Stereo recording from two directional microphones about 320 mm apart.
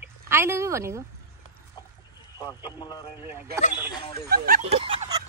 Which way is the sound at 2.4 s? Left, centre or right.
Centre.